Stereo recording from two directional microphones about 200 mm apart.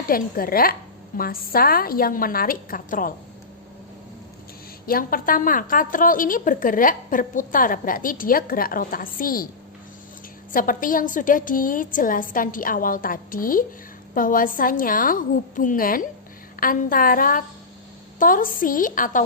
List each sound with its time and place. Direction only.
0.1 s a woman's voice: 45° left (ahead or behind)
4.9 s a woman's voice: 45° left (ahead or behind)
10.5 s a woman's voice: 45° left (ahead or behind)